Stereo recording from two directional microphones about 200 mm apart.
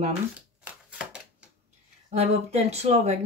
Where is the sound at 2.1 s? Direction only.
35° right (ahead or behind).